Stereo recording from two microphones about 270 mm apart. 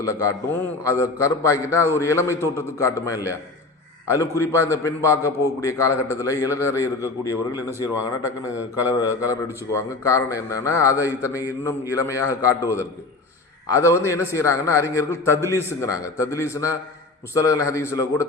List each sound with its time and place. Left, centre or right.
0.0 s a man's voice: centre
9.0 s a man's voice: centre